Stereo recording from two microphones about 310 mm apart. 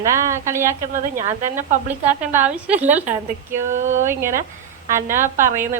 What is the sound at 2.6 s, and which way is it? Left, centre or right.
Speech, centre.